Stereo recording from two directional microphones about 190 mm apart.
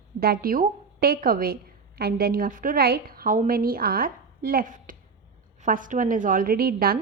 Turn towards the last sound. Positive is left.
turn(degrees=-50)  # may be behind; listen again after turning